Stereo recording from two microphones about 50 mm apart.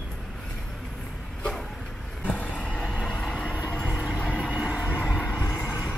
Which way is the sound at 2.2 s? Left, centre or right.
Left.